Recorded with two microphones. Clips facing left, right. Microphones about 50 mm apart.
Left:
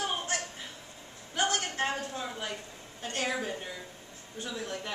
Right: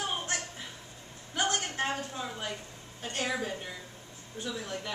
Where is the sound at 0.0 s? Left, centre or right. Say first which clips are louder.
Left 1 dB; centre.